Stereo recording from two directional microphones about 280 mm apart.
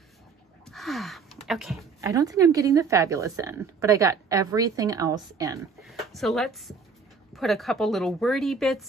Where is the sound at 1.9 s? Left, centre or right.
Centre.